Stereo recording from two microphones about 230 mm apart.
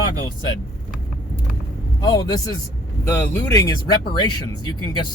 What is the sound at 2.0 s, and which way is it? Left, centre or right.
Speech, centre.